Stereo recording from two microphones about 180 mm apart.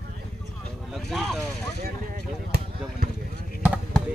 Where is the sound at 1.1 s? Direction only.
Centre (ahead or behind).